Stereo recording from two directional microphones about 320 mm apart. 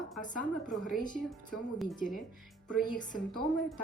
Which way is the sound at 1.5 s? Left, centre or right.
Centre.